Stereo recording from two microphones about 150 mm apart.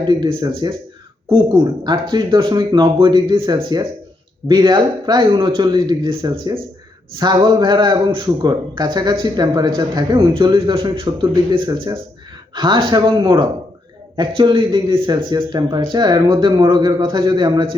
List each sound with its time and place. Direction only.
0.0 s a man's voice: 30° right (ahead or behind)
1.8 s a man's voice: 30° right (ahead or behind)